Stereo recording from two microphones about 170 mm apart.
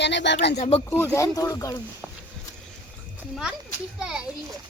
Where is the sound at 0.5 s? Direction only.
45° left (ahead or behind).